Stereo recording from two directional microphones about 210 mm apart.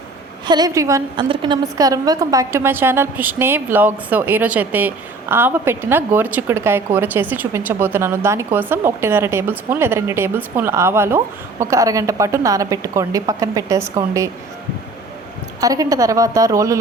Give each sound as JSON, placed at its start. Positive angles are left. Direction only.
{"t": 0.4, "sound": "a woman's voice", "side_deg": -20}
{"t": 15.6, "sound": "a woman's voice", "side_deg": -15}